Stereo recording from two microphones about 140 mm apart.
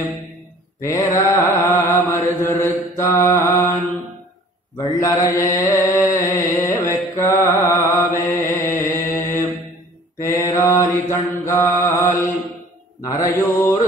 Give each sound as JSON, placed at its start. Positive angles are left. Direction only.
{"t": 0.7, "sound": "mantra", "side_deg": 20}
{"t": 5.0, "sound": "mantra", "side_deg": 20}